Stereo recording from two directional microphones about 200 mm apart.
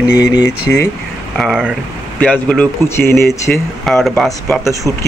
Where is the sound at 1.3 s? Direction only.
Centre (ahead or behind).